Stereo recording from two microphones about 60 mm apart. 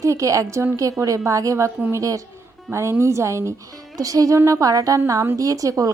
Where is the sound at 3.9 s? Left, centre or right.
Right.